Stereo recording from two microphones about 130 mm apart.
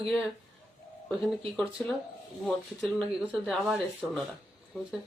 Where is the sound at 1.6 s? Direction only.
Centre (ahead or behind).